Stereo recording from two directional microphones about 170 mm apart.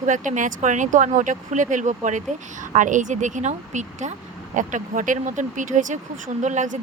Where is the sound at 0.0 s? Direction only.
45° right (ahead or behind).